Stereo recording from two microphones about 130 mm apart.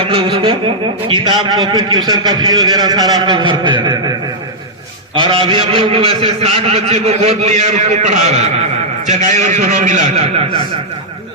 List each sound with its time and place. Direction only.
0.0 s a sound: 45° right (ahead or behind)
1.0 s a man's voice: 35° right (ahead or behind)
5.1 s a man's voice: 40° right (ahead or behind); by 10.4 s 60° right (ahead or behind)